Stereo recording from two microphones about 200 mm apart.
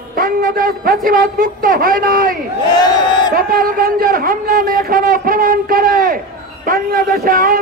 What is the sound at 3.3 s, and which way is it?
Speech, 45° right (ahead or behind).